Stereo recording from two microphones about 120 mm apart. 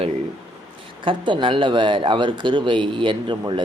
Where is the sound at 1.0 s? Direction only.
40° right (ahead or behind).